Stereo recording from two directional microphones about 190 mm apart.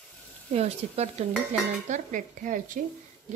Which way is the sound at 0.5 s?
35° right (ahead or behind).